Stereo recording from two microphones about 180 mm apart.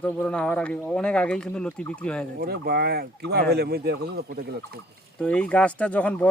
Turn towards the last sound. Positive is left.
turn(degrees=10)  # may be behind; listen again after turning